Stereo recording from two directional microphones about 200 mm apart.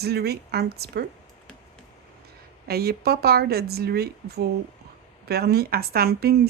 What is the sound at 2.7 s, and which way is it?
Speech, 50° right (ahead or behind).